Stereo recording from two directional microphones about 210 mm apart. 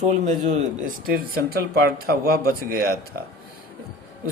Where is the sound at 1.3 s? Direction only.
45° right (ahead or behind).